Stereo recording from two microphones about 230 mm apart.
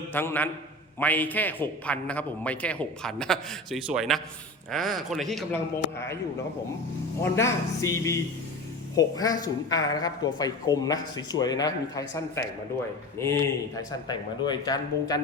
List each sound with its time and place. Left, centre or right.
0.1 s a woman's voice: centre
7.2 s a woman's voice: centre
14.1 s a woman's voice: centre